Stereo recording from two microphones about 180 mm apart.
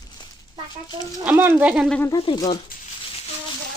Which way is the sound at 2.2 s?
25° left (ahead or behind).